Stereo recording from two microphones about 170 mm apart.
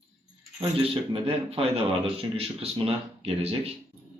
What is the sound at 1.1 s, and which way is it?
Speech, 35° right (ahead or behind).